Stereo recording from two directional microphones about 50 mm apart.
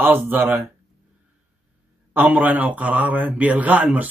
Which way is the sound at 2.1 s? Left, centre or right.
Right.